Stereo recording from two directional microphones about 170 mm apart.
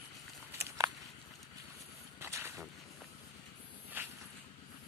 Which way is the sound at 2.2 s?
15° right (ahead or behind).